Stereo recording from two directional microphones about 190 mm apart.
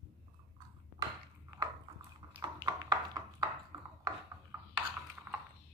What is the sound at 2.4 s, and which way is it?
Tap, 20° right (ahead or behind).